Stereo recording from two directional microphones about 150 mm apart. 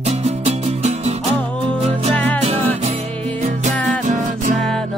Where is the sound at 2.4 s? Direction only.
40° right (ahead or behind).